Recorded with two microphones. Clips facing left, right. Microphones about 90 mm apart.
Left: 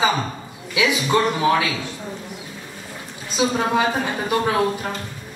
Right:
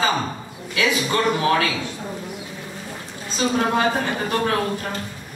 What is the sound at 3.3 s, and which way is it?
A woman's voice, 10° left (ahead or behind).